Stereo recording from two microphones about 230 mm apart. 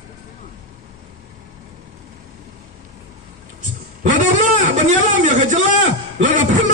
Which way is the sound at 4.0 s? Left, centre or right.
Right.